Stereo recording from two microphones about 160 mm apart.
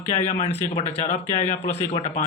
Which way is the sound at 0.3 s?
40° left (ahead or behind).